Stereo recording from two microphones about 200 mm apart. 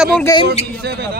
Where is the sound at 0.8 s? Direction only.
50° right (ahead or behind).